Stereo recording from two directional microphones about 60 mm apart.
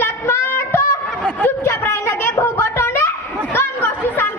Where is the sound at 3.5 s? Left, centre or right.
Left.